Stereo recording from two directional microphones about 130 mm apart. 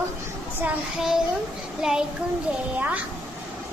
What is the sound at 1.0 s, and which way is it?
A child's voice, centre (ahead or behind).